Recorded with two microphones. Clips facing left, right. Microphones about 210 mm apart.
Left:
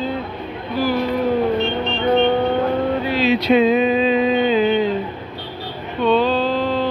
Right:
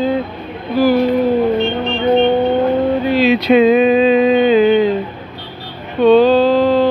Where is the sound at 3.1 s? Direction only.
65° right (ahead or behind).